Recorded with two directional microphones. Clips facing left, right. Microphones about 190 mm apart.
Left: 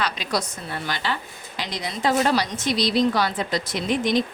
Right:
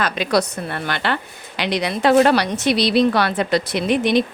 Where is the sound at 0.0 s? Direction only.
65° right (ahead or behind).